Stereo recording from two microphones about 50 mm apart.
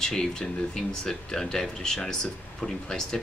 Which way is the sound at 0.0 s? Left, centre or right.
Centre.